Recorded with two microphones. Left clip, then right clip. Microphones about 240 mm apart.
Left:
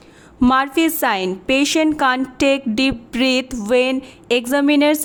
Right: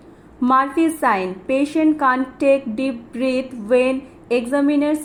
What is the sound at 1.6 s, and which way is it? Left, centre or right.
Speech, left.